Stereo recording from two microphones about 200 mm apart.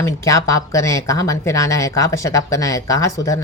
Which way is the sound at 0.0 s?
15° left (ahead or behind).